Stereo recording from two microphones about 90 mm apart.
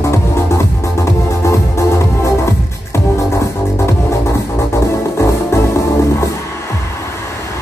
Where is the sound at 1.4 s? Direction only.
35° left (ahead or behind).